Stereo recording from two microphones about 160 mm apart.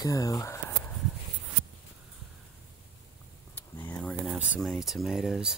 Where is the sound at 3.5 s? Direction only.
10° left (ahead or behind).